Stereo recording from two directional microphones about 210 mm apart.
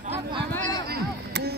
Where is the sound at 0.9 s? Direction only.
50° right (ahead or behind).